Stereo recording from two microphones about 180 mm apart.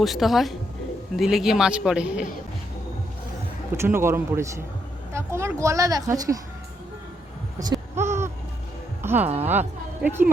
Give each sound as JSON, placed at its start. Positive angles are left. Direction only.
{"t": 0.0, "sound": "a man's voice", "side_deg": 0}
{"t": 3.8, "sound": "a woman's voice", "side_deg": -15}
{"t": 7.6, "sound": "a sound", "side_deg": -20}
{"t": 9.0, "sound": "music", "side_deg": -10}
{"t": 9.4, "sound": "speech", "side_deg": -10}